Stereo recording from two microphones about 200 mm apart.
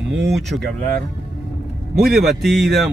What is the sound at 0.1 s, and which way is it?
Speech, 60° right (ahead or behind).